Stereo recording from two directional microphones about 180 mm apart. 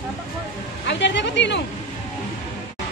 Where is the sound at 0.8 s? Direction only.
80° left.